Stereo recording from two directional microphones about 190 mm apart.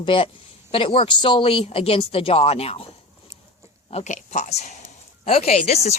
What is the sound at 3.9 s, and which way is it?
Speech, 35° left (ahead or behind).